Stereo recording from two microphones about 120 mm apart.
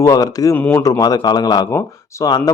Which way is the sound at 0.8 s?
30° left (ahead or behind).